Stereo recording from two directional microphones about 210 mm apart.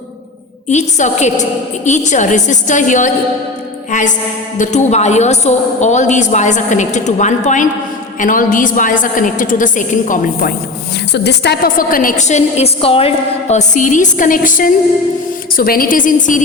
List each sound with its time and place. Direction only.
0.7 s a woman's voice: 35° left (ahead or behind)
4.5 s a woman's voice: 35° left (ahead or behind)
11.1 s a woman's voice: 55° left (ahead or behind)